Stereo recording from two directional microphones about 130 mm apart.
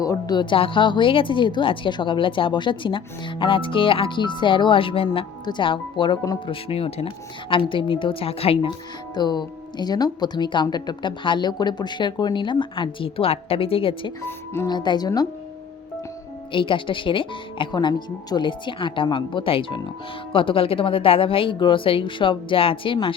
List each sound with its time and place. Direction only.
0.0 s a woman's voice: 30° left (ahead or behind); by 8.7 s 50° left (ahead or behind)
9.1 s a woman's voice: 35° left (ahead or behind)
14.3 s speech: 15° left (ahead or behind)
14.7 s a woman's voice: 35° left (ahead or behind)
16.5 s a woman's voice: 40° left (ahead or behind)